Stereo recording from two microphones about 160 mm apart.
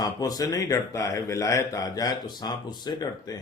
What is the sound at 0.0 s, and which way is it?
Speech, 25° left (ahead or behind).